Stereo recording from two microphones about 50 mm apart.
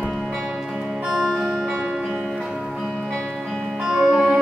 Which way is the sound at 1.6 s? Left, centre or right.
Centre.